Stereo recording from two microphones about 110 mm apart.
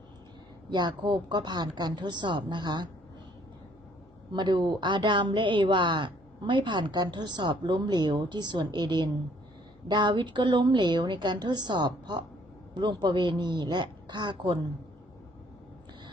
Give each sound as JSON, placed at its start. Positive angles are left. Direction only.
{"t": 0.7, "sound": "speech", "side_deg": -40}
{"t": 4.3, "sound": "speech", "side_deg": -45}